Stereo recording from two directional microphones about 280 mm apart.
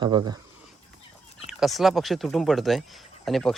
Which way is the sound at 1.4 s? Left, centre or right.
Centre.